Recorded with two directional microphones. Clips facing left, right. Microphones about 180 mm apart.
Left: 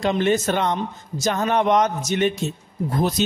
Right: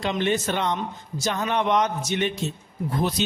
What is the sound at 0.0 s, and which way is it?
A man's voice, 45° left (ahead or behind).